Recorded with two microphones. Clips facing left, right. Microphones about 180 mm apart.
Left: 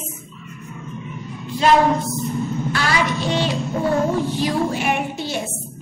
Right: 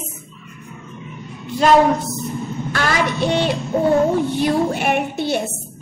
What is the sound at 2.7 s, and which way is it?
Speech, 55° right (ahead or behind).